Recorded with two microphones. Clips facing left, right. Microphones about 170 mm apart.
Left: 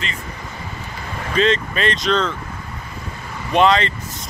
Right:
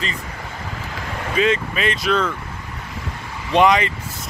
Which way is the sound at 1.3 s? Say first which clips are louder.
Left 1 dB; 10° right (ahead or behind).